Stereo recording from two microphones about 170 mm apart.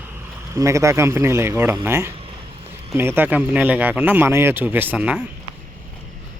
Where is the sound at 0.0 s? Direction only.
10° right (ahead or behind).